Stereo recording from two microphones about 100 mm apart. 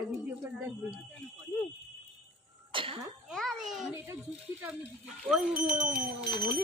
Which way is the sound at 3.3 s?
Centre (ahead or behind).